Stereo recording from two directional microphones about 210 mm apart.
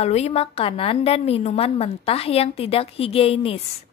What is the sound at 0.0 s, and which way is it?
A woman's voice, 30° left (ahead or behind).